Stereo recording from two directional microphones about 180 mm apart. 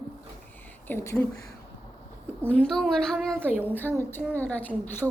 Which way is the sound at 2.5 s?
5° left (ahead or behind).